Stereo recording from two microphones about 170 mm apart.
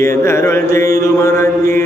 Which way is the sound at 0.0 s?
15° left (ahead or behind).